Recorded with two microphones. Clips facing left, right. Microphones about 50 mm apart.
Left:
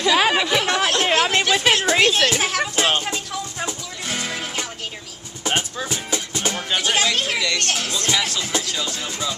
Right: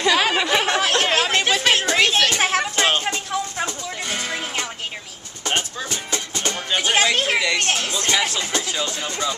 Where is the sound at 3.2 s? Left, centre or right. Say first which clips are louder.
Right 4 dB; right.